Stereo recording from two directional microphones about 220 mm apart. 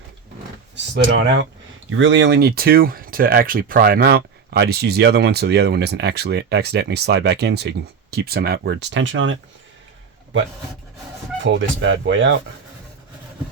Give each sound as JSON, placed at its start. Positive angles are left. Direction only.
{"t": 0.9, "sound": "speech", "side_deg": -55}
{"t": 11.4, "sound": "speech", "side_deg": -60}